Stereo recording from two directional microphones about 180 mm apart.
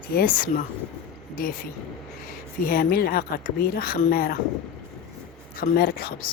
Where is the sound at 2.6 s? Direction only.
55° left (ahead or behind).